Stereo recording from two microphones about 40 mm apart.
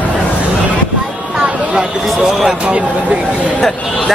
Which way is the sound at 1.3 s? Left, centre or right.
Right.